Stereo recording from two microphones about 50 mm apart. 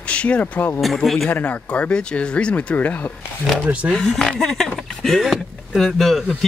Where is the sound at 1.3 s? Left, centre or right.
Left.